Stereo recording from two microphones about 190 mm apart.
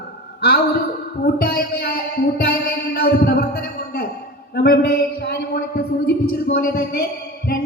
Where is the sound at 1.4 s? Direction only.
55° left (ahead or behind).